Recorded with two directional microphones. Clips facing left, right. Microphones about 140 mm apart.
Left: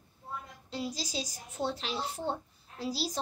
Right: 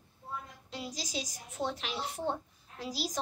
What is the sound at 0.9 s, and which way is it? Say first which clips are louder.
A woman's voice: left 1 dB; 35° left (ahead or behind).